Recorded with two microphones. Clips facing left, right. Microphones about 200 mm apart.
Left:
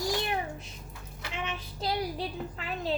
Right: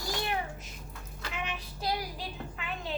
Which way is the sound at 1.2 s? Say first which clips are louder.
Left 1 dB; 25° left (ahead or behind).